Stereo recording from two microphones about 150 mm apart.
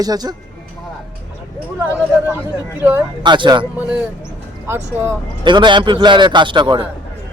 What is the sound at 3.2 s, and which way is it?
Speech, 30° right (ahead or behind).